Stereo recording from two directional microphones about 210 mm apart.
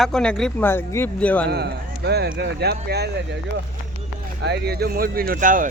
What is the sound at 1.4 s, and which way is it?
Speech, 50° right (ahead or behind).